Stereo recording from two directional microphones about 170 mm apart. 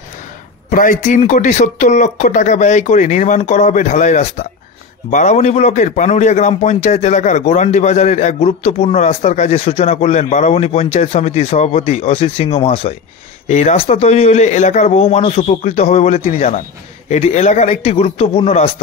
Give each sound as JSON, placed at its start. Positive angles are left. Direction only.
{"t": 0.7, "sound": "a man's voice", "side_deg": 50}